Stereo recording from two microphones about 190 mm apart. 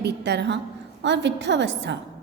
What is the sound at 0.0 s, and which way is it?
A woman's voice, 65° right (ahead or behind).